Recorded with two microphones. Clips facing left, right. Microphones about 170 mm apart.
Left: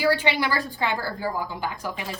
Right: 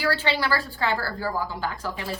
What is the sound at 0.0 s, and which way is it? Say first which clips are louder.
A woman's voice: left 3 dB; 15° left (ahead or behind).